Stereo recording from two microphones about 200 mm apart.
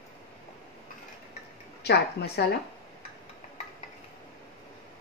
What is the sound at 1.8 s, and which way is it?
Speech, 55° left (ahead or behind).